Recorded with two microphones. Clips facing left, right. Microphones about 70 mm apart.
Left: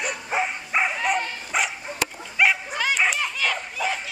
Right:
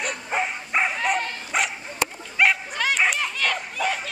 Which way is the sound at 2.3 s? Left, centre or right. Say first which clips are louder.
Even; centre.